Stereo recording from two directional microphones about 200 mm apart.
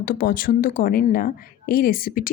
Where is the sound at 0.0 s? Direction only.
45° left (ahead or behind).